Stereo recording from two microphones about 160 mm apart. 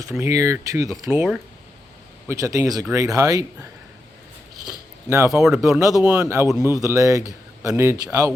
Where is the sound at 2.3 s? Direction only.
20° right (ahead or behind).